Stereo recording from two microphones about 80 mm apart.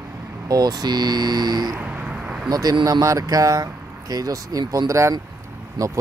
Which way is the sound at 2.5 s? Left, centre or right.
Right.